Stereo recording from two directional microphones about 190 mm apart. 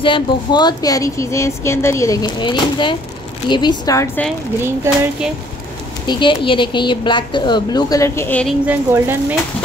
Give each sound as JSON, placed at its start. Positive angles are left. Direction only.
{"t": 0.0, "sound": "a woman's voice", "side_deg": 25}
{"t": 6.0, "sound": "speech", "side_deg": 25}
{"t": 8.6, "sound": "a woman's voice", "side_deg": -10}